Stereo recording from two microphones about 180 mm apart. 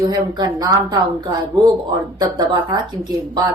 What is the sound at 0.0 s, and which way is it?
A woman's voice, 25° right (ahead or behind).